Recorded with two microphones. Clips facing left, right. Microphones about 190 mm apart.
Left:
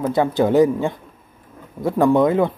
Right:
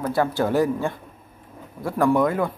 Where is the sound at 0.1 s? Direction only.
20° left (ahead or behind).